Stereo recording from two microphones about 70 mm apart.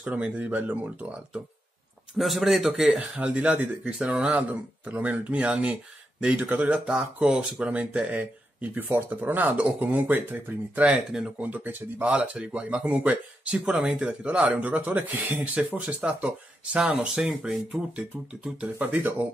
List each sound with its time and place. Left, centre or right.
0.0 s speech: right
2.1 s speech: centre
2.9 s speech: centre
16.0 s speech: centre